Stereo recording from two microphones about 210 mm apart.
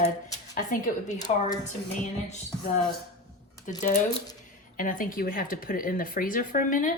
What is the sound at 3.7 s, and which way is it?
Speech, 35° left (ahead or behind).